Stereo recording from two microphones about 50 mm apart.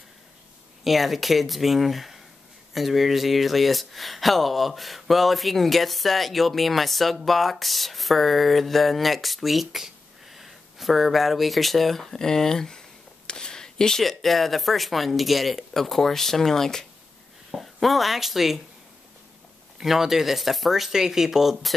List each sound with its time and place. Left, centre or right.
0.8 s speech: centre
19.8 s speech: centre